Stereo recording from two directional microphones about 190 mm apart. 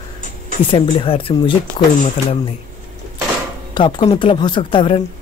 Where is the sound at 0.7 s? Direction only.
30° left (ahead or behind).